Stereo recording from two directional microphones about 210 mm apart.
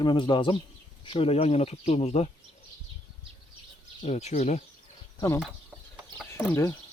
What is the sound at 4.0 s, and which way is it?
Speech, 35° left (ahead or behind).